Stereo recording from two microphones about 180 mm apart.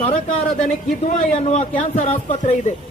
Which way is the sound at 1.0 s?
40° left (ahead or behind).